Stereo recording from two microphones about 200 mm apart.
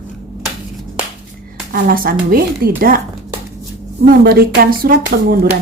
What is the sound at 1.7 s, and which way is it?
A woman's voice, 45° right (ahead or behind).